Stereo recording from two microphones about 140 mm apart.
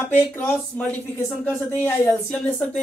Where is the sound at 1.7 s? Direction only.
15° left (ahead or behind).